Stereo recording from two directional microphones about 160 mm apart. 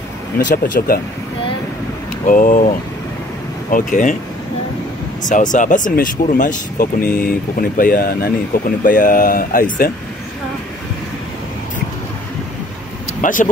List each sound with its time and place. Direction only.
0.4 s speech: 65° left (ahead or behind)
2.2 s speech: 55° left (ahead or behind)
3.7 s speech: 55° left (ahead or behind)
5.2 s speech: 50° left (ahead or behind); by 8.3 s 70° left (ahead or behind)
8.8 s speech: 55° left (ahead or behind)
13.2 s speech: 55° left (ahead or behind)